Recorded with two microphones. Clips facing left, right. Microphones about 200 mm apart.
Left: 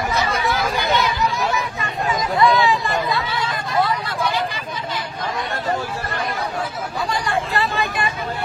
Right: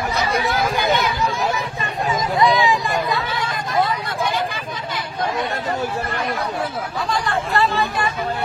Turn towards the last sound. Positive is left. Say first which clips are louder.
# right 2 dB
turn(degrees=15)  # may be behind; listen again after turning